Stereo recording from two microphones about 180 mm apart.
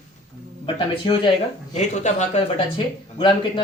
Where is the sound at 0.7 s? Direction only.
30° left (ahead or behind).